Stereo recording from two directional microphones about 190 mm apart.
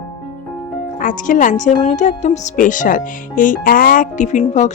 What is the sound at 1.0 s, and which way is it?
Speech, 45° left (ahead or behind).